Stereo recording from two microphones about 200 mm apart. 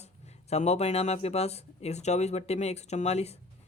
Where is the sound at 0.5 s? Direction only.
35° left (ahead or behind).